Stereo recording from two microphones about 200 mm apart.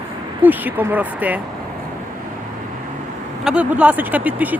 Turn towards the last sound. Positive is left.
turn(degrees=-10)  # may be behind; listen again after turning